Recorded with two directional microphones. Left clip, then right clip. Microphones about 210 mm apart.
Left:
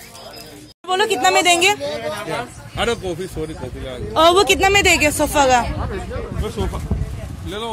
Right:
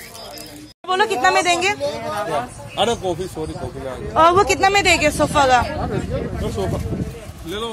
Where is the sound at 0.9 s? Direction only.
20° left (ahead or behind); by 1.8 s 35° left (ahead or behind).